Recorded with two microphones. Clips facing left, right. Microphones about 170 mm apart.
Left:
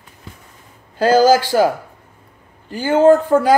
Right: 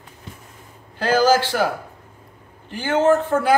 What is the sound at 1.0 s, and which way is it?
Speech, 40° left (ahead or behind).